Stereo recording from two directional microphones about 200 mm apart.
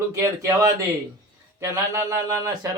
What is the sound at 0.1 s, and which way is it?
Speech, 15° right (ahead or behind).